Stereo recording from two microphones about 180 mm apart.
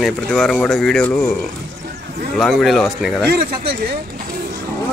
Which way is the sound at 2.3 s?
Centre (ahead or behind).